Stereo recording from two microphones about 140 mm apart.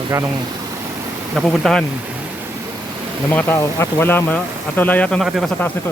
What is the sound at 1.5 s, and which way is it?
Speech, 5° left (ahead or behind).